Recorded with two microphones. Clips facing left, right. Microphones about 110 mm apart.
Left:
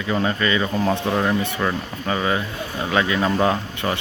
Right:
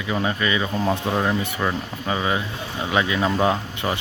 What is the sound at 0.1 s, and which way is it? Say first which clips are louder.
Speech: left 2 dB; 10° right (ahead or behind).